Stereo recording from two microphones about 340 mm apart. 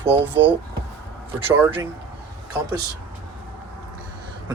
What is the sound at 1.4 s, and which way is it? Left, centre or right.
Speech, centre.